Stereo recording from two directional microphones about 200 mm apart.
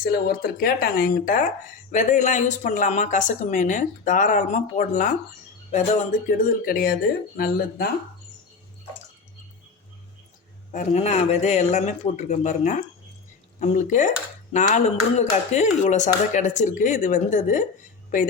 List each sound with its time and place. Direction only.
0.0 s speech: 50° left (ahead or behind)
10.7 s speech: 35° left (ahead or behind)